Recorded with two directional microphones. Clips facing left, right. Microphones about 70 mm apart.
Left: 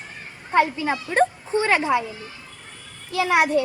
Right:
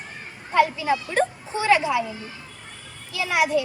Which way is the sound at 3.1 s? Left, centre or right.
Left.